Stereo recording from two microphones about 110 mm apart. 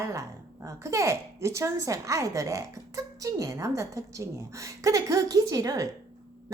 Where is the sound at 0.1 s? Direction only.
30° right (ahead or behind).